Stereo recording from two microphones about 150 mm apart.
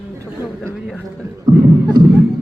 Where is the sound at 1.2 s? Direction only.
25° right (ahead or behind).